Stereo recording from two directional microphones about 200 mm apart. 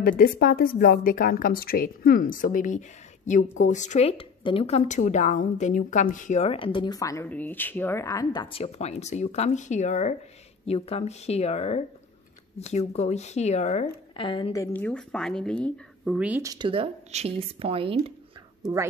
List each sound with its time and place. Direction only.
0.2 s a woman's voice: 45° left (ahead or behind); by 16.2 s 5° left (ahead or behind)
16.2 s speech: 10° right (ahead or behind)
16.5 s speech: 25° right (ahead or behind)